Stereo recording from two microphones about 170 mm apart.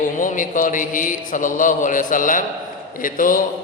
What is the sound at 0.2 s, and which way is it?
A man's voice, 50° left (ahead or behind).